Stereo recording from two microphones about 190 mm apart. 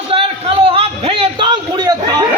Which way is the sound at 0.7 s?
30° right (ahead or behind).